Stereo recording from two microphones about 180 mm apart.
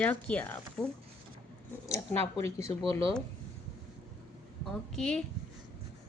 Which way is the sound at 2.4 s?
20° left (ahead or behind).